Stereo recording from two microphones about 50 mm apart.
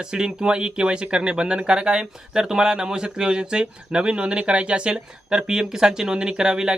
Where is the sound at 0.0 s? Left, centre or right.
Centre.